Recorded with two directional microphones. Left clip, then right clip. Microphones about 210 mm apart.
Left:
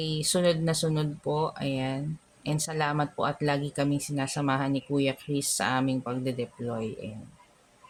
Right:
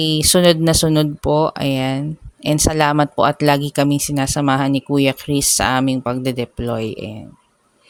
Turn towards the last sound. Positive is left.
turn(degrees=-50)  # may be behind; listen again after turning